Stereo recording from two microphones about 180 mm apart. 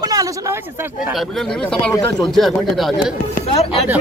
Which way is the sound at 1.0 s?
Centre (ahead or behind).